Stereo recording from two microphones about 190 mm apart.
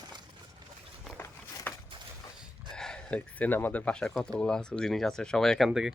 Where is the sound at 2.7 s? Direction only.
5° left (ahead or behind).